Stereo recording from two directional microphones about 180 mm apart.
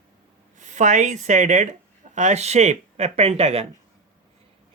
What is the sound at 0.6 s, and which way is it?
Speech, 40° right (ahead or behind).